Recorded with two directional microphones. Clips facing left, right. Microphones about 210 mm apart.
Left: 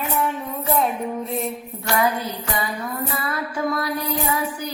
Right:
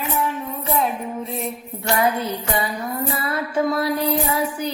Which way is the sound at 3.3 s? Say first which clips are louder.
Right 4 dB; 25° right (ahead or behind).